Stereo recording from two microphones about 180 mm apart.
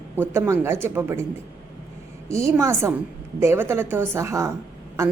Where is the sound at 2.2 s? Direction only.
15° right (ahead or behind).